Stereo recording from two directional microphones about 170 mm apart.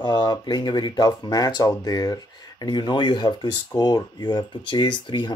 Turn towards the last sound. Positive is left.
turn(degrees=25)  # may be behind; listen again after turning